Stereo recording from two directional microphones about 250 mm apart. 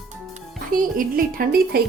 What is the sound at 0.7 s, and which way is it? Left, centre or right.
A woman's voice, right.